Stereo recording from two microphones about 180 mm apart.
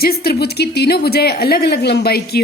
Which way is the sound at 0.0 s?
55° left (ahead or behind).